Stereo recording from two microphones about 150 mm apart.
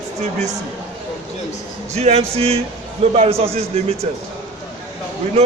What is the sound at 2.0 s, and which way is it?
A man's voice, 45° right (ahead or behind).